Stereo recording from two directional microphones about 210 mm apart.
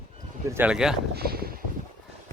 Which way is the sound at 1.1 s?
45° right (ahead or behind).